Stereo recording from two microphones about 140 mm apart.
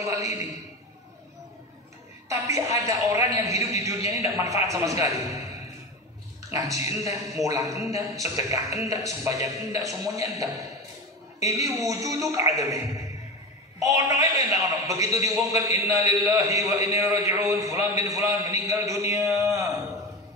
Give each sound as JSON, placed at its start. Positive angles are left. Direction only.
{"t": 0.0, "sound": "a man's voice", "side_deg": -25}
{"t": 2.2, "sound": "a man's voice", "side_deg": -20}
{"t": 6.5, "sound": "a man's voice", "side_deg": -25}